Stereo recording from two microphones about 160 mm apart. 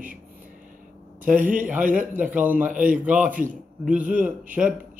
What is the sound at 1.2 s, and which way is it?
Speech, 55° right (ahead or behind).